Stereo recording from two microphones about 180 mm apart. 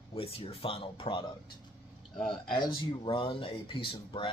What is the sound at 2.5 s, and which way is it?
Speech, 25° left (ahead or behind).